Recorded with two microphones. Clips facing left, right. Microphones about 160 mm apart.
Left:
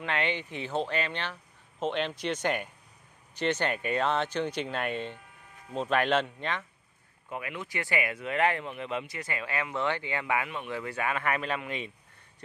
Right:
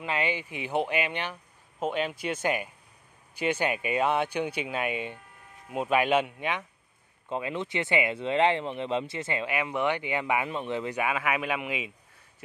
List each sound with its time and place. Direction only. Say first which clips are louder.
0.0 s speech: right 1 dB; 5° right (ahead or behind)
7.2 s speech: right 6 dB; 25° right (ahead or behind); by 11.9 s 10° right (ahead or behind)